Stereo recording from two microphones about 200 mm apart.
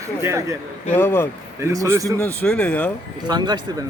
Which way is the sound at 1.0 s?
10° left (ahead or behind).